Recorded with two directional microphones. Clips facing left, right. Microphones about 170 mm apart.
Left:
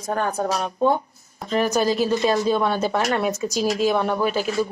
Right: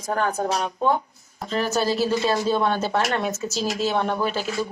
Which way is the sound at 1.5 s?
15° left (ahead or behind).